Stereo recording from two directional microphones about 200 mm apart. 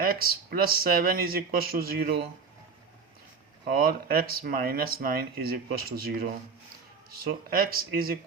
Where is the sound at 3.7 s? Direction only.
50° right (ahead or behind).